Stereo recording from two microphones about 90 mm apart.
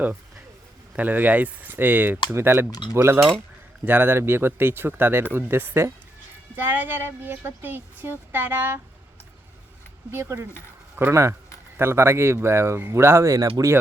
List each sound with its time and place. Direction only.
0.9 s speech: 20° right (ahead or behind)
10.1 s speech: 30° right (ahead or behind)